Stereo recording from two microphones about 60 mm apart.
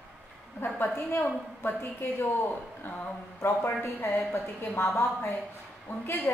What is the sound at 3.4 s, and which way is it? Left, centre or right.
A woman's voice, left.